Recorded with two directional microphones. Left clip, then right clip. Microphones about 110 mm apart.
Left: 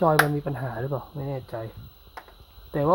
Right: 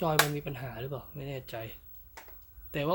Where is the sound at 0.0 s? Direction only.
15° left (ahead or behind).